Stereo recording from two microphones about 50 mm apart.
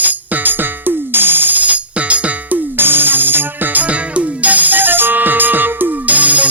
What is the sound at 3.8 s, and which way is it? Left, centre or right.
Music, right.